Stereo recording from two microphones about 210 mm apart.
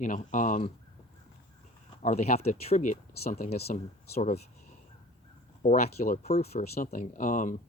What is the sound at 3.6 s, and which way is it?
Speech, 50° left (ahead or behind).